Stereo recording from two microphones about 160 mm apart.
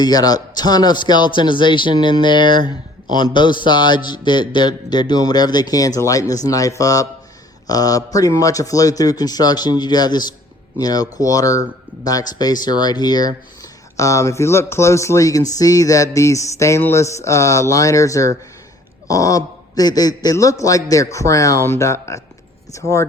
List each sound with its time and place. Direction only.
0.0 s speech: 25° left (ahead or behind)